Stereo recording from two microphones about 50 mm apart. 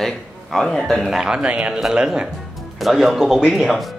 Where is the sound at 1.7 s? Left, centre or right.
Centre.